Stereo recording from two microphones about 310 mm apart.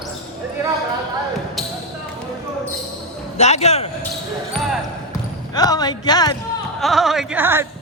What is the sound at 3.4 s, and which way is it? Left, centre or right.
Speech, left.